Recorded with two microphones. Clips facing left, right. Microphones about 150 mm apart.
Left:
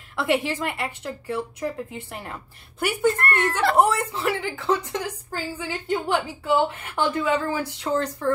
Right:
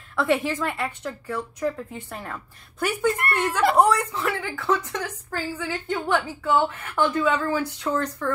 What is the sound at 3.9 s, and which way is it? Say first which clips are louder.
A woman's voice: even; 30° left (ahead or behind).